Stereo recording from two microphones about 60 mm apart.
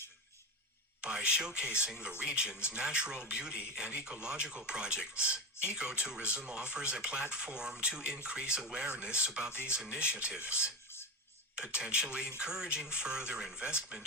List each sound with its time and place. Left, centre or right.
1.0 s speech: centre